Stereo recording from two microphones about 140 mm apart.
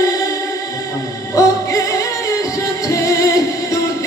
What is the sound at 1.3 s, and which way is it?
Music, 25° left (ahead or behind).